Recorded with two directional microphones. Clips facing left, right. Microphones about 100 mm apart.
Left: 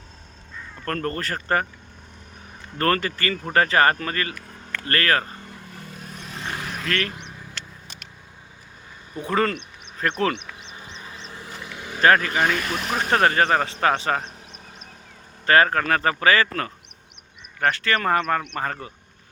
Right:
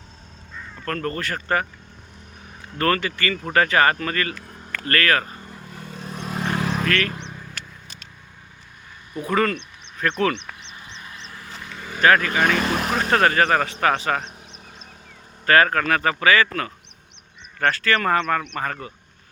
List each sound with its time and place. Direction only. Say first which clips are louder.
0.9 s speech: even; 35° left (ahead or behind)
2.7 s speech: even; 35° left (ahead or behind)
5.5 s vehicle: right 2 dB; 25° right (ahead or behind)
6.1 s vehicle: right 8 dB; 45° right (ahead or behind)
6.6 s vehicle: right 8 dB; 90° right
9.1 s speech: right 1 dB; 30° left (ahead or behind)
10.8 s vehicle: even; 30° left (ahead or behind); by 11.9 s 15° left (ahead or behind)
12.0 s speech: even; 30° left (ahead or behind)
12.4 s speech: right 2 dB; 65° right (ahead or behind)
13.1 s speech: even; 20° left (ahead or behind)
15.4 s speech: right 1 dB; 25° left (ahead or behind)
17.7 s speech: right 1 dB; 25° left (ahead or behind)